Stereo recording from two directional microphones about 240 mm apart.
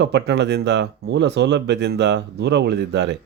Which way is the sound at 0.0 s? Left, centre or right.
Right.